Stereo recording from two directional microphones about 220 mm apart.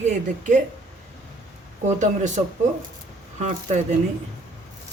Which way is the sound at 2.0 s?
30° right (ahead or behind).